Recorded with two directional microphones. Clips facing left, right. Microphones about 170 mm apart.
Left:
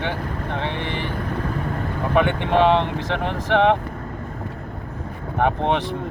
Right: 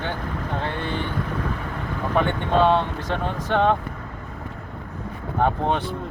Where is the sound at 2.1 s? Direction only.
65° left (ahead or behind).